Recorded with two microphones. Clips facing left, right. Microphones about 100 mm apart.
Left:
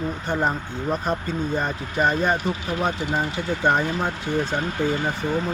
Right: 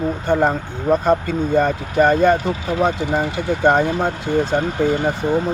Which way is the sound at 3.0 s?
85° right.